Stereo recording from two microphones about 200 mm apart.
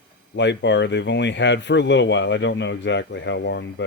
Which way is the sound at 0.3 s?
65° left (ahead or behind).